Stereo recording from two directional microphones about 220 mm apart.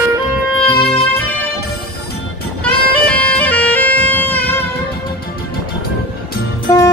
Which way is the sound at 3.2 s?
5° left (ahead or behind).